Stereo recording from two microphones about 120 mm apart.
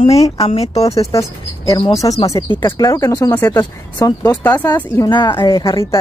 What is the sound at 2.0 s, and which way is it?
Speech, 35° left (ahead or behind).